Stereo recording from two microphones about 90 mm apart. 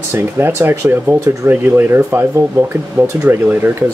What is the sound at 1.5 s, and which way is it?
Speech, 20° right (ahead or behind).